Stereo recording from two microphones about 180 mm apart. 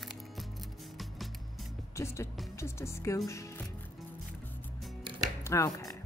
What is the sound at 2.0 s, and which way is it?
A woman's voice, 15° left (ahead or behind).